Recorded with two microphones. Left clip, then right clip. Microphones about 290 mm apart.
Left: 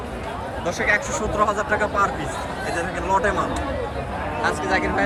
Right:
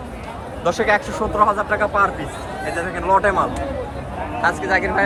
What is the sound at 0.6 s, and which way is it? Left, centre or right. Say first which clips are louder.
Speech: right 4 dB; centre.